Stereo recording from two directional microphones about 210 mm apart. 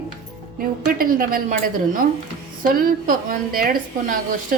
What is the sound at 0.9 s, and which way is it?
A woman's voice, 40° right (ahead or behind).